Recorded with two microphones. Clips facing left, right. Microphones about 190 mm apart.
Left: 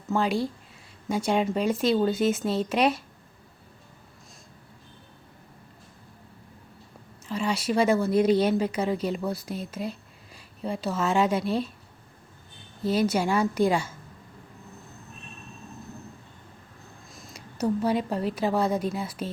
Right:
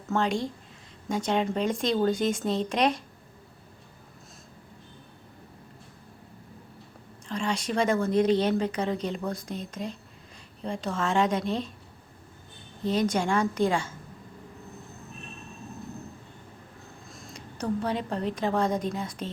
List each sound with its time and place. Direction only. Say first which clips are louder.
0.1 s a woman's voice: left 2 dB; 5° left (ahead or behind)
7.3 s speech: left 2 dB; 5° left (ahead or behind)
12.8 s speech: left 2 dB; 10° left (ahead or behind)
17.1 s a woman's voice: right 2 dB; centre (ahead or behind)